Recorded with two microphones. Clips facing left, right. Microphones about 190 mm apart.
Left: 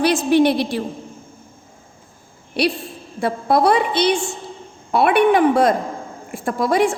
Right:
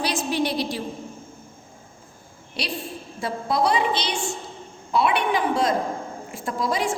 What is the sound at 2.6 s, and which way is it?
A woman's voice, 60° left (ahead or behind).